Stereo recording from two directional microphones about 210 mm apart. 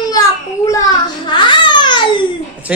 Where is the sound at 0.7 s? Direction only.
15° left (ahead or behind).